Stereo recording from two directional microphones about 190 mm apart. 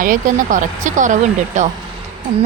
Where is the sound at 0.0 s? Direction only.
45° right (ahead or behind).